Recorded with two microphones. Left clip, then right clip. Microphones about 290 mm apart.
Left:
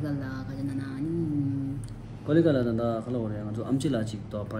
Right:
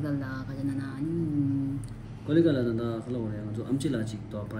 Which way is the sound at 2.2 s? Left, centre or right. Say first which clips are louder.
Left 1 dB; centre.